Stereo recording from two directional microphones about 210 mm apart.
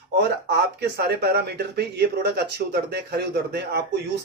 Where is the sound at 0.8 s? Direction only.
50° right (ahead or behind).